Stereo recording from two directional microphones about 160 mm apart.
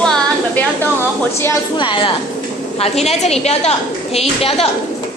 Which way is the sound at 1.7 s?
30° left (ahead or behind).